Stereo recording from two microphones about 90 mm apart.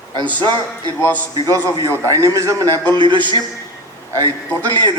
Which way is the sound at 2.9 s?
60° right (ahead or behind).